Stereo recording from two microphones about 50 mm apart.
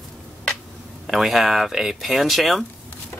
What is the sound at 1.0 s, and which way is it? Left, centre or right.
Speech, centre.